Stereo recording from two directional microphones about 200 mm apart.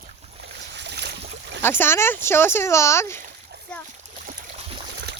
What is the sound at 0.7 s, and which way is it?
Boat, 60° right (ahead or behind).